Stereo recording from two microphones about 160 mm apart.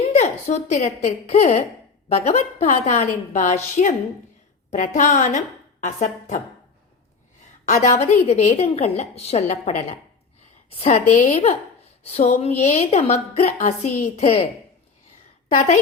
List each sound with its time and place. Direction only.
0.1 s a woman's voice: 45° left (ahead or behind)
7.6 s a woman's voice: 45° left (ahead or behind)